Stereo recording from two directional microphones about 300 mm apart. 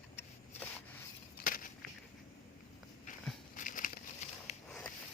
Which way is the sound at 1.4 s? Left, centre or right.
Left.